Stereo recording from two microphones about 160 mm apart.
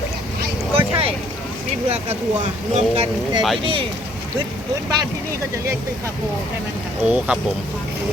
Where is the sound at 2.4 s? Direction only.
45° right (ahead or behind).